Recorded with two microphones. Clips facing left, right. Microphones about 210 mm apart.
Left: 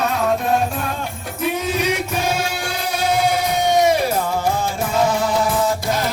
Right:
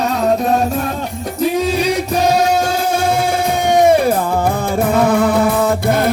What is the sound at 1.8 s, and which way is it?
Choir, 35° right (ahead or behind).